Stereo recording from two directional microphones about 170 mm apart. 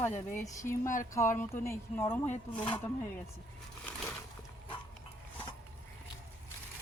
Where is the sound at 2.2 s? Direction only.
40° left (ahead or behind).